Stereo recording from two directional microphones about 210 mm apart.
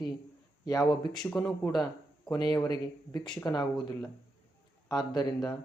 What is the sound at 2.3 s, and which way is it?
Speech, 20° left (ahead or behind).